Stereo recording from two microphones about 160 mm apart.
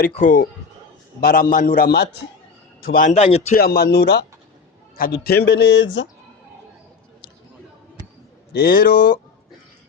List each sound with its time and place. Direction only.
0.2 s speech: 55° left (ahead or behind)
1.2 s a man's voice: 65° left (ahead or behind)
2.9 s a man's voice: 50° left (ahead or behind)
3.5 s speech: 80° left
4.9 s speech: 70° left (ahead or behind); by 5.7 s 90° left
8.5 s speech: 65° left (ahead or behind)